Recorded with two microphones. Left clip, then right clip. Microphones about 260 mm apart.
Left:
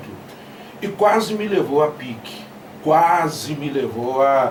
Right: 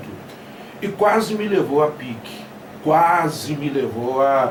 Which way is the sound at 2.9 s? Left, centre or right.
Centre.